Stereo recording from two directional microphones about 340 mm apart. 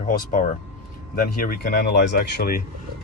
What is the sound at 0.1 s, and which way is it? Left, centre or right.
Speech, left.